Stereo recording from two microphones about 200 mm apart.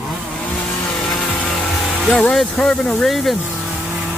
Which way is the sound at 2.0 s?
5° left (ahead or behind).